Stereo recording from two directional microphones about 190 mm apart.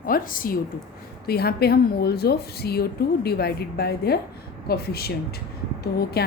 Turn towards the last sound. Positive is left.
turn(degrees=55)  # may be behind; listen again after turning